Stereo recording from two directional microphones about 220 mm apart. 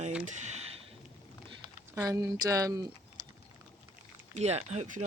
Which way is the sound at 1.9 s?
10° right (ahead or behind).